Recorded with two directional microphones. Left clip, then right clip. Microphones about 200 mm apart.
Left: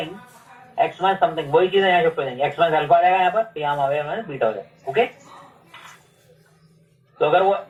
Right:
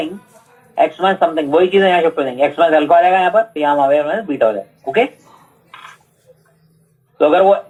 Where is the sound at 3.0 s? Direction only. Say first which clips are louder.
Right 5 dB; 45° right (ahead or behind).